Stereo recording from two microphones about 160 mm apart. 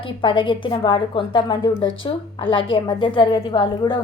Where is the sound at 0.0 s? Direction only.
30° left (ahead or behind).